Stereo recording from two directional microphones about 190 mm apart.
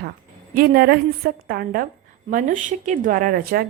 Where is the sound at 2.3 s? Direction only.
40° right (ahead or behind).